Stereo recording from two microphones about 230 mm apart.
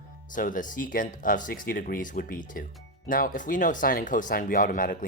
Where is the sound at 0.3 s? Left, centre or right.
Left.